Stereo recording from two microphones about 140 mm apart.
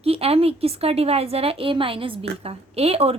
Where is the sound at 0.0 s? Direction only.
45° right (ahead or behind).